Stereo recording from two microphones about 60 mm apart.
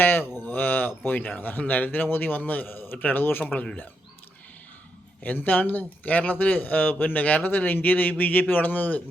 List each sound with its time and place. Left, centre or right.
0.0 s a sound: left
0.3 s a man's voice: left
5.2 s speech: left